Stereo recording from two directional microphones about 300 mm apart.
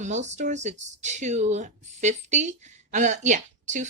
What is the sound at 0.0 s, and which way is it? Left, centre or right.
Speech, right.